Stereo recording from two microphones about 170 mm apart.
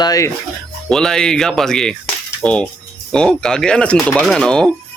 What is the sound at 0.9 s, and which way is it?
Speech, 5° left (ahead or behind).